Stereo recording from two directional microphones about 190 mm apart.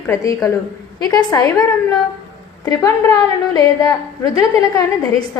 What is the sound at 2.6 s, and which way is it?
A woman's voice, 20° left (ahead or behind).